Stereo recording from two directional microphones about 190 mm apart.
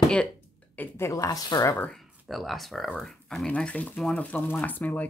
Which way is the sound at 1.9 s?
Centre (ahead or behind).